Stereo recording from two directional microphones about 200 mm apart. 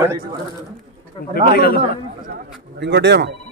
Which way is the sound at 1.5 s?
50° left (ahead or behind).